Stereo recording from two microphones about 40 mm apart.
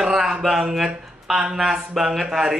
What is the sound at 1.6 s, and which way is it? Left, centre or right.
Speech, centre.